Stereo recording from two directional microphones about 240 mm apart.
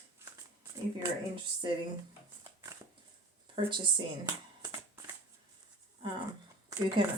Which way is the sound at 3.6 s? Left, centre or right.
Centre.